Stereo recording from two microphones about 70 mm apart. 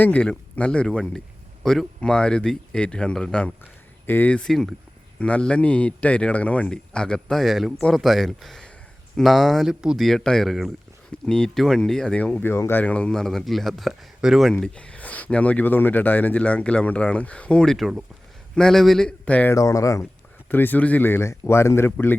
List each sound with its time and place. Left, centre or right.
0.0 s a man's voice: centre
3.6 s a sound: left
4.3 s a man's voice: centre
12.2 s speech: left
12.8 s speech: centre
14.8 s a man's voice: centre
19.5 s speech: left
20.5 s speech: left